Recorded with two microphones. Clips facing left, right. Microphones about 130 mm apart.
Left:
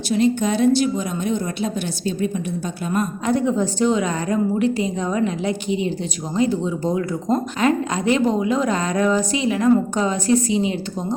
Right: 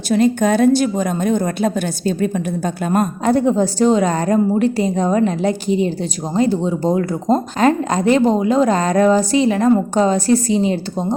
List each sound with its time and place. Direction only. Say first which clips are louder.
0.1 s a woman's voice: right 4 dB; 50° right (ahead or behind)